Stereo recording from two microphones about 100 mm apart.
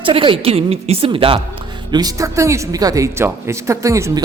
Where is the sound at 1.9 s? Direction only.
40° right (ahead or behind).